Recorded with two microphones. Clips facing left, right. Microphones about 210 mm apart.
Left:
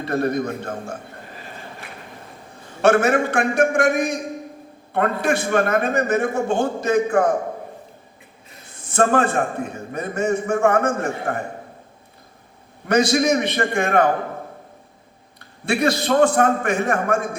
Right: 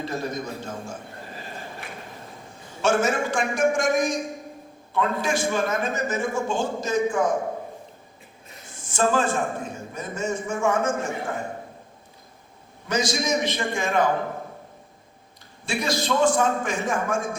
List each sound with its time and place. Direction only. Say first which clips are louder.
0.0 s a man's voice: left 8 dB; 60° left (ahead or behind)
2.8 s a man's voice: left 6 dB; 60° left (ahead or behind)
8.7 s a man's voice: left 4 dB; 60° left (ahead or behind)
12.9 s a man's voice: left 7 dB; 60° left (ahead or behind)
15.4 s a man's voice: left 8 dB; 60° left (ahead or behind)